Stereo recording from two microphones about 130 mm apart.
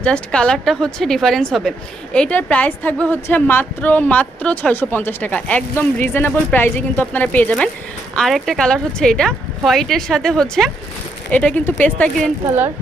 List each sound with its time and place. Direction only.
0.0 s a woman's voice: 10° left (ahead or behind)